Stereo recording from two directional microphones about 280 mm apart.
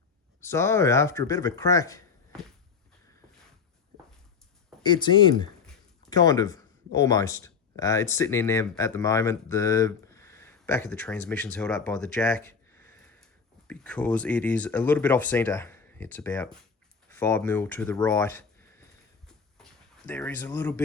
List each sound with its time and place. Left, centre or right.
0.4 s speech: centre
4.8 s speech: centre
19.3 s a sound: centre